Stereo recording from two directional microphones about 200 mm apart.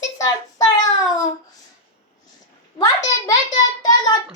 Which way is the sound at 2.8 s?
20° left (ahead or behind).